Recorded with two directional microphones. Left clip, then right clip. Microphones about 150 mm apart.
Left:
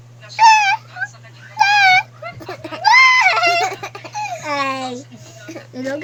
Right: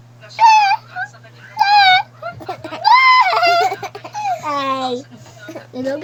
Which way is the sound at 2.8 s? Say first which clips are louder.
Even; 20° right (ahead or behind).